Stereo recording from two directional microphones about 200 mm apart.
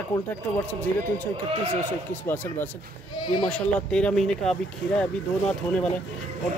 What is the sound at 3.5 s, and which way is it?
Speech, 5° left (ahead or behind).